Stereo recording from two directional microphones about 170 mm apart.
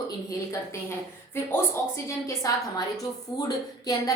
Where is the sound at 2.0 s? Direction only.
20° left (ahead or behind).